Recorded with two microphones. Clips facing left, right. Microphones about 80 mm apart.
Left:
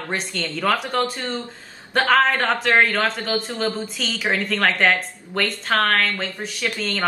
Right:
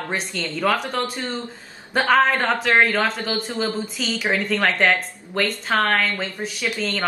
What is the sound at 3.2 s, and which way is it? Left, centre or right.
Speech, right.